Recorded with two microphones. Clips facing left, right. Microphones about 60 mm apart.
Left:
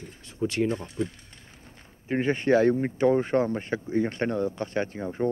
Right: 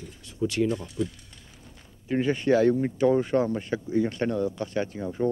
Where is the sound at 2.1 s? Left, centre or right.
Left.